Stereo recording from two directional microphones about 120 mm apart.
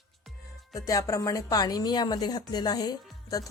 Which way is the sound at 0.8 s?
30° left (ahead or behind).